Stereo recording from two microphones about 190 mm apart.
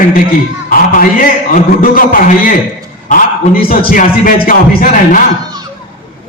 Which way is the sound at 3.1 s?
50° left (ahead or behind).